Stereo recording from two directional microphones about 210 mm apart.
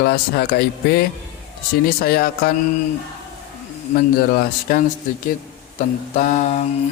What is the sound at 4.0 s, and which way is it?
Speech, 45° left (ahead or behind).